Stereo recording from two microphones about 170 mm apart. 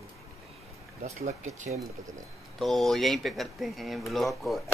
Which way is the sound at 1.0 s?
40° right (ahead or behind).